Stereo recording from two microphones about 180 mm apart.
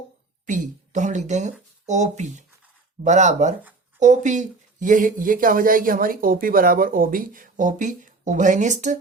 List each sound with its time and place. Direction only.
0.4 s speech: 45° right (ahead or behind)